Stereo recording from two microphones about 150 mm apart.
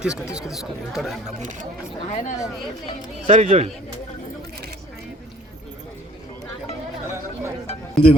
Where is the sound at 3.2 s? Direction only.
40° right (ahead or behind).